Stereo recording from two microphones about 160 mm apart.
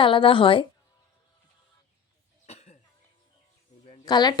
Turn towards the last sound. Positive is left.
turn(degrees=25)  # may be behind; listen again after turning